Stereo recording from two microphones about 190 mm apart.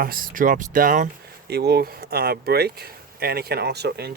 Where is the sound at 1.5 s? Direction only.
60° right (ahead or behind).